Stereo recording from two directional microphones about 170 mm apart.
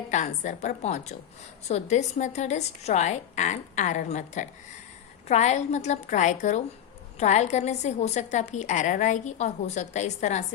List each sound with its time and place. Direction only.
0.1 s a woman's voice: 45° left (ahead or behind)